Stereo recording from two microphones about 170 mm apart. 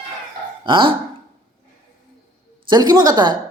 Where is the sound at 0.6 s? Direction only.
30° right (ahead or behind).